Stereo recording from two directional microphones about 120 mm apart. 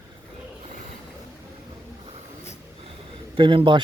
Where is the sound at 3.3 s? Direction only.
45° right (ahead or behind).